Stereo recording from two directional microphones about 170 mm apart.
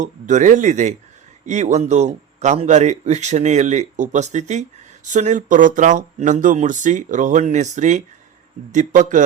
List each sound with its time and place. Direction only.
0.0 s speech: 45° right (ahead or behind)